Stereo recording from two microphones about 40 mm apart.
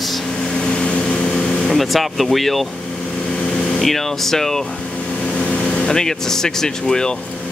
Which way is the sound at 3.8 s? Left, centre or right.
Centre.